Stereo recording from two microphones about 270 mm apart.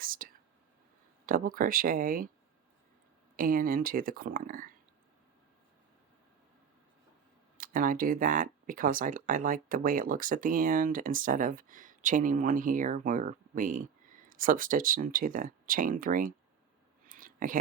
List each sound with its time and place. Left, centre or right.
0.0 s speech: right
1.3 s speech: right
3.3 s speech: right
7.6 s speech: right
17.1 s a sound: right